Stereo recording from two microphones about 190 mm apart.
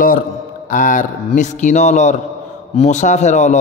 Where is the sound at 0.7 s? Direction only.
45° left (ahead or behind).